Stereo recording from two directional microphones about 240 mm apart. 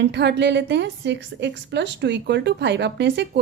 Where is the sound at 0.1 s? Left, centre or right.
Right.